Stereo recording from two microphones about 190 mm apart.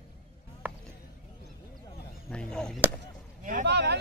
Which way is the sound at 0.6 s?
10° right (ahead or behind).